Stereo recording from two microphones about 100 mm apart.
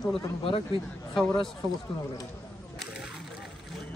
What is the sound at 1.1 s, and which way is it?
Speech, 5° left (ahead or behind).